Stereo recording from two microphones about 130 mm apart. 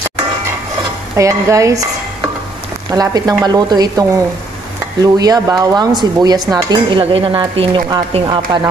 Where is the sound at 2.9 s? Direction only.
30° right (ahead or behind).